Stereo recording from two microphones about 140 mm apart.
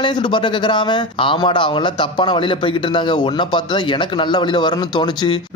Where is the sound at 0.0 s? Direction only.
35° left (ahead or behind).